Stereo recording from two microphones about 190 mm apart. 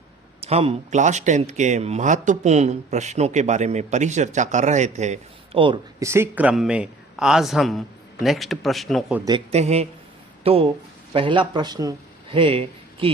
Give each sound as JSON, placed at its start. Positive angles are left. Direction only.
{"t": 0.4, "sound": "speech", "side_deg": -35}
{"t": 6.0, "sound": "a man's voice", "side_deg": -15}
{"t": 9.5, "sound": "speech", "side_deg": -35}